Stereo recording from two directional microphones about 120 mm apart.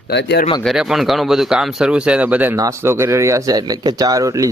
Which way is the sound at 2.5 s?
25° right (ahead or behind).